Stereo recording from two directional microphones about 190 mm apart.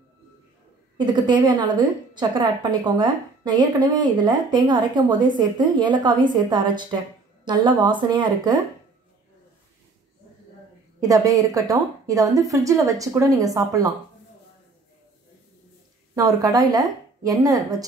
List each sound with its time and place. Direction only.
0.9 s a woman's voice: 25° right (ahead or behind)
11.0 s a woman's voice: 20° right (ahead or behind)
16.2 s a woman's voice: 20° right (ahead or behind)